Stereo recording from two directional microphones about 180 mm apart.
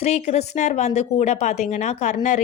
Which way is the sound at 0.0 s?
35° left (ahead or behind).